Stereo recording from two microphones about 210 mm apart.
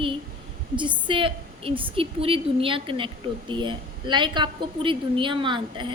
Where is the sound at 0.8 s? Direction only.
25° right (ahead or behind).